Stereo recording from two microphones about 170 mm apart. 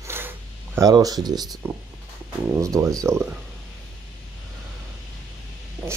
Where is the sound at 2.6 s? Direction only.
20° right (ahead or behind).